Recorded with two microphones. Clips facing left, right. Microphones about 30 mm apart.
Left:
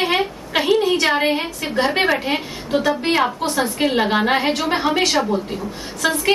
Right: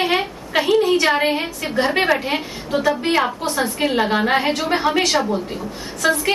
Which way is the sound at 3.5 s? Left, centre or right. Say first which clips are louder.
Left 1 dB; centre.